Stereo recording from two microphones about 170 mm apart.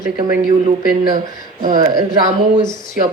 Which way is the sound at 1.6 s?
25° right (ahead or behind).